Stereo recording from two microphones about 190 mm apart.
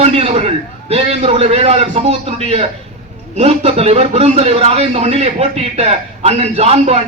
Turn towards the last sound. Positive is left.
turn(degrees=-35)  # may be behind; listen again after turning